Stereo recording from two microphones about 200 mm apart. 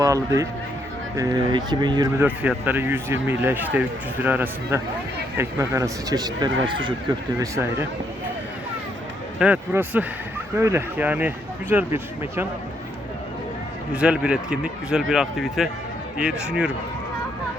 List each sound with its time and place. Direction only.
0.0 s a man's voice: 15° right (ahead or behind)
9.4 s speech: 5° right (ahead or behind)
13.9 s speech: 5° right (ahead or behind)